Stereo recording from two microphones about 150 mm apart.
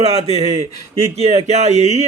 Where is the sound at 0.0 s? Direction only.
45° right (ahead or behind).